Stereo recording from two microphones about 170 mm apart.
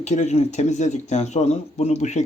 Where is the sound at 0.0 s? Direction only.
45° left (ahead or behind).